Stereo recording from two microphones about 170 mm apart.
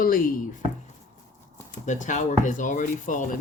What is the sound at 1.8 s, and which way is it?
Speech, 45° left (ahead or behind).